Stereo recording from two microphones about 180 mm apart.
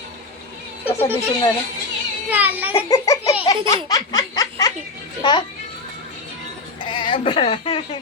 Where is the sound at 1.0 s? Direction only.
30° left (ahead or behind).